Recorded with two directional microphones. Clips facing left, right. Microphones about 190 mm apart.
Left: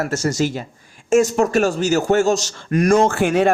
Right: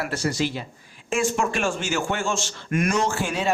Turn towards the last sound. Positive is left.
turn(degrees=60)  # may be behind; listen again after turning